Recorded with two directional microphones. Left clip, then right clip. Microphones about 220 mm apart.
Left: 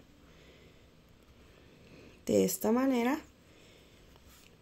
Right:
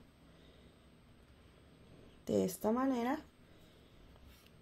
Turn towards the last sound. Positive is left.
turn(degrees=25)  # may be behind; listen again after turning